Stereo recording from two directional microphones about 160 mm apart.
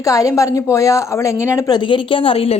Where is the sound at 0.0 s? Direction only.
20° left (ahead or behind).